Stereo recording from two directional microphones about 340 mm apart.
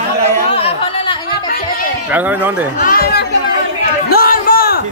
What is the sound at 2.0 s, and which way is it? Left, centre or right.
Speech, centre.